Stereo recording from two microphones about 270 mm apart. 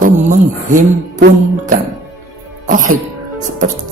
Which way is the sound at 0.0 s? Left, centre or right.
Right.